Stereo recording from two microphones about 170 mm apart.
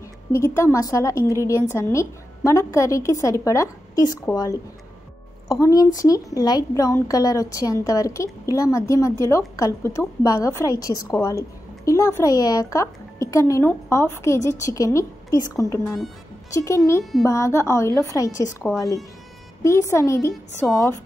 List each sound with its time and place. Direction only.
0.3 s a woman's voice: 15° left (ahead or behind)
15.8 s speech: 5° left (ahead or behind)
16.5 s a woman's voice: 15° left (ahead or behind)
18.6 s speech: centre (ahead or behind)
19.6 s a woman's voice: 15° left (ahead or behind)